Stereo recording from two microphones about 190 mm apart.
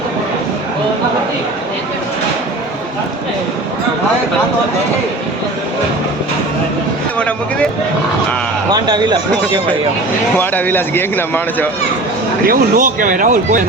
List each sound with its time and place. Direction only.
7.2 s a man's voice: 5° left (ahead or behind)
8.7 s a man's voice: 20° right (ahead or behind)
10.3 s a man's voice: 10° left (ahead or behind)
12.5 s speech: 45° right (ahead or behind)